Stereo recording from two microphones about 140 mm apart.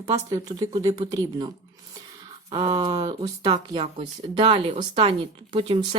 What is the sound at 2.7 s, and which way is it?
Speech, 30° right (ahead or behind).